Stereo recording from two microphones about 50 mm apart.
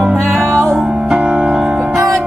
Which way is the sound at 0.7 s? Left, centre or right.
Centre.